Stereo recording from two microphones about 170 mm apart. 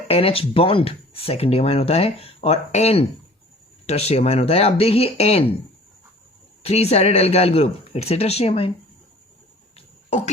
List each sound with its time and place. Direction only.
0.1 s speech: 35° left (ahead or behind)
6.6 s speech: 40° left (ahead or behind)